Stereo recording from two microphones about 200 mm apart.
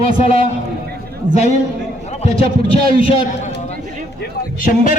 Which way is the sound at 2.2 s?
30° left (ahead or behind).